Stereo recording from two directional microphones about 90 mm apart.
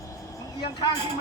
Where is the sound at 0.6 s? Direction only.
55° left (ahead or behind).